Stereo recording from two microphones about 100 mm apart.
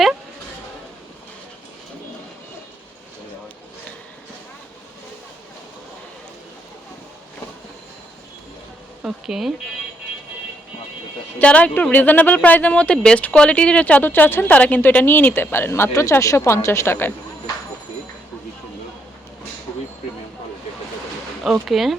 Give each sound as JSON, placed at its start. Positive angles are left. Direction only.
{"t": 9.0, "sound": "speech", "side_deg": -5}
{"t": 11.3, "sound": "speech", "side_deg": 15}
{"t": 21.4, "sound": "speech", "side_deg": -5}